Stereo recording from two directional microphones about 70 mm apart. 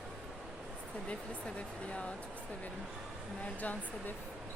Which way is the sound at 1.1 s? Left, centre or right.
Centre.